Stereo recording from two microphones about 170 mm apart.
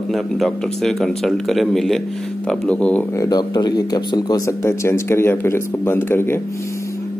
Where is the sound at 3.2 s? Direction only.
25° left (ahead or behind).